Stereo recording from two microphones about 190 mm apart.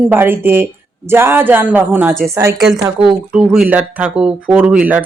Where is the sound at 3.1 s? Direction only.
5° right (ahead or behind).